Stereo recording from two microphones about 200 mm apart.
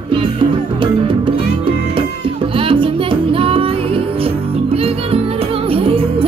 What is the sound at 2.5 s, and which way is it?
Music, 25° right (ahead or behind).